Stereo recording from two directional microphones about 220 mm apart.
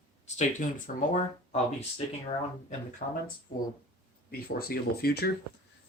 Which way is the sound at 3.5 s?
50° left (ahead or behind).